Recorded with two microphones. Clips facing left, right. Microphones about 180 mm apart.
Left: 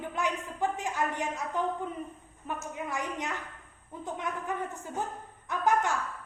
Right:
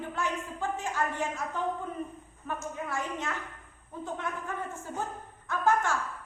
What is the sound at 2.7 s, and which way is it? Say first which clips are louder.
A woman's voice: left 1 dB; 15° left (ahead or behind).